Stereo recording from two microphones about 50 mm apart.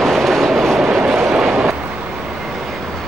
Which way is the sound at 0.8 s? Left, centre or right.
Centre.